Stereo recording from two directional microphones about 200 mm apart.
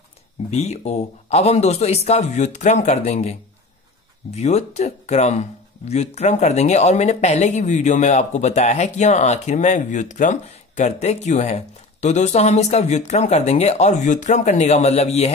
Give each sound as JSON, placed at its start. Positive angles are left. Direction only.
{"t": 0.5, "sound": "speech", "side_deg": 35}